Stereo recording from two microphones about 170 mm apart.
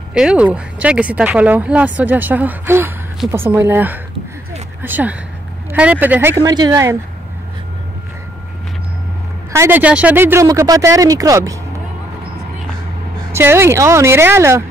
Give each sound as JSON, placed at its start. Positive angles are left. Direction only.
{"t": 0.1, "sound": "speech", "side_deg": -5}
{"t": 9.5, "sound": "speech", "side_deg": -15}
{"t": 13.3, "sound": "speech", "side_deg": -15}